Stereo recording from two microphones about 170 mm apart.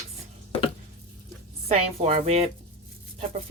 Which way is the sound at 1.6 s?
35° right (ahead or behind).